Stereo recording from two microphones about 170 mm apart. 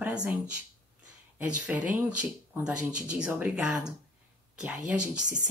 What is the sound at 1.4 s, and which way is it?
Speech, 10° right (ahead or behind).